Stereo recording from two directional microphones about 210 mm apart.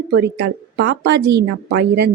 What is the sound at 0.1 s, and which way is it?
A woman's voice, 50° right (ahead or behind).